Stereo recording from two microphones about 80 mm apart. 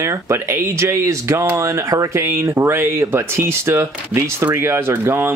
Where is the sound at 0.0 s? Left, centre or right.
Right.